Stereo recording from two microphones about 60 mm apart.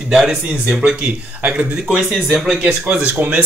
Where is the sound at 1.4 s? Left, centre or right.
Right.